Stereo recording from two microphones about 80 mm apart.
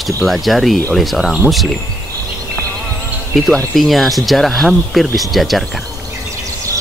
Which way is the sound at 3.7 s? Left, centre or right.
Centre.